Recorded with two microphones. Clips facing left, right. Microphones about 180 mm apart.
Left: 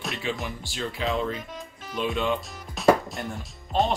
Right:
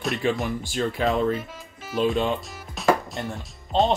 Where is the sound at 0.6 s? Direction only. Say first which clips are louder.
Right 5 dB; 50° right (ahead or behind).